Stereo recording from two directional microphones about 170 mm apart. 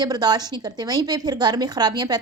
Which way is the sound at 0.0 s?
25° right (ahead or behind).